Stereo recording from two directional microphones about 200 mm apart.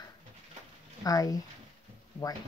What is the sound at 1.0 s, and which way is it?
Speech, 20° left (ahead or behind).